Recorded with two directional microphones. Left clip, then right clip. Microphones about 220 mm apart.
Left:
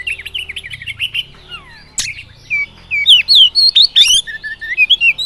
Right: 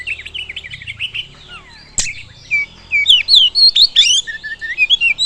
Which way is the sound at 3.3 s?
15° left (ahead or behind).